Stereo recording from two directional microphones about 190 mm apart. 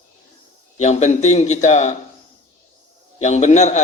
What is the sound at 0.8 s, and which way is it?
A man's voice, 35° left (ahead or behind).